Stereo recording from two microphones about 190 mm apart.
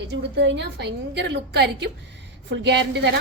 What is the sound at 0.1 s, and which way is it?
A woman's voice, 65° right (ahead or behind).